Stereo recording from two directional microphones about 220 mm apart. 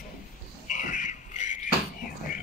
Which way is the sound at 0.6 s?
35° left (ahead or behind).